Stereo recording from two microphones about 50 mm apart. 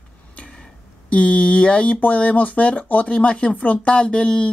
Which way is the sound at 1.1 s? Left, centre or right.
Left.